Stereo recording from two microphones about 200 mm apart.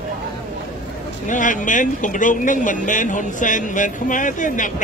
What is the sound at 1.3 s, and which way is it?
A man's voice, 40° left (ahead or behind).